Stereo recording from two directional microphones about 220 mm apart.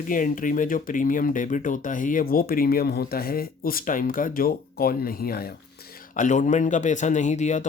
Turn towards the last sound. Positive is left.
turn(degrees=35)  # may be behind; listen again after turning